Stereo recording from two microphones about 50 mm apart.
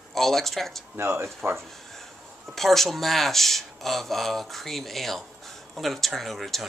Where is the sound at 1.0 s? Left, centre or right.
Right.